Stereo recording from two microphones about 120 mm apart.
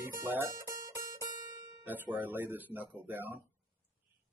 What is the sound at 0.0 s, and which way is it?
Music, 15° right (ahead or behind).